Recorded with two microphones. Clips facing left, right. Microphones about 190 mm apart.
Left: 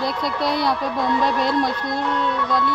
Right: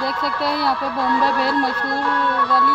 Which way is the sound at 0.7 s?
20° left (ahead or behind).